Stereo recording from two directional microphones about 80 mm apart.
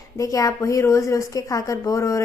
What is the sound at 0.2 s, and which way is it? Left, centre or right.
A woman's voice, left.